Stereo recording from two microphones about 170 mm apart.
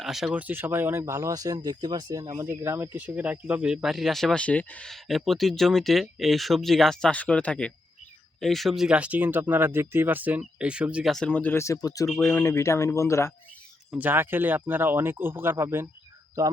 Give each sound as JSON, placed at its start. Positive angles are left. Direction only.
{"t": 0.0, "sound": "speech", "side_deg": 0}
{"t": 12.0, "sound": "speech", "side_deg": 5}
{"t": 13.9, "sound": "speech", "side_deg": -10}